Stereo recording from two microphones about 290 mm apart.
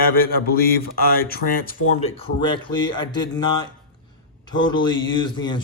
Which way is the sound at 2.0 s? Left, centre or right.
Left.